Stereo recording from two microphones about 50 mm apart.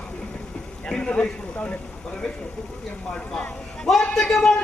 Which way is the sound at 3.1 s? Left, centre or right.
Left.